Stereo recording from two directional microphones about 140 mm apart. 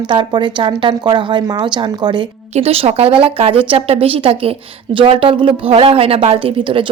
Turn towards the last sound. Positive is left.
turn(degrees=-40)  # may be behind; listen again after turning